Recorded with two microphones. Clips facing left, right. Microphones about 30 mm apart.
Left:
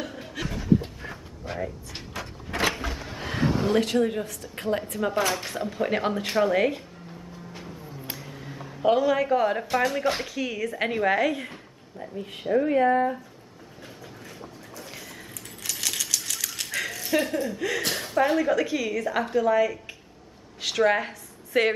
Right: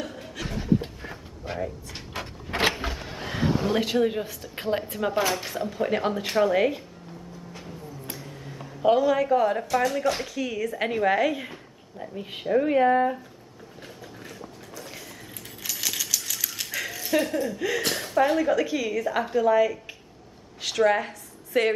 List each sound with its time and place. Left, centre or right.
0.0 s a sound: centre
0.5 s a sound: centre
1.5 s speech: centre
2.1 s vehicle: right
2.9 s speech: centre
5.3 s speech: centre
8.2 s speech: centre
15.6 s coin: centre
20.6 s speech: centre